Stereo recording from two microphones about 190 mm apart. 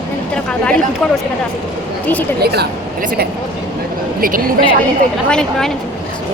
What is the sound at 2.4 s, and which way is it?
Speech, 55° right (ahead or behind).